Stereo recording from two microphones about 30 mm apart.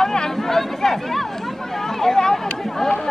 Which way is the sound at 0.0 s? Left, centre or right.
Centre.